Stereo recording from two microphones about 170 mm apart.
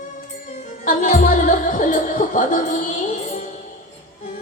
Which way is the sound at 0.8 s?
50° left (ahead or behind).